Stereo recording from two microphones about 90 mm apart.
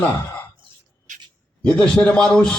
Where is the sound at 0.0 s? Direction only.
20° left (ahead or behind).